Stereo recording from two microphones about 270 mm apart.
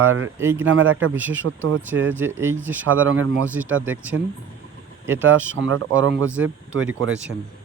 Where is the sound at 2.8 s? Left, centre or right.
Right.